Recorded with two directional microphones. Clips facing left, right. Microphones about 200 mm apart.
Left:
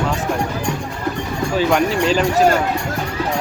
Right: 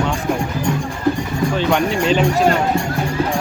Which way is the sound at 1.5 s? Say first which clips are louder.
Left 3 dB; centre (ahead or behind).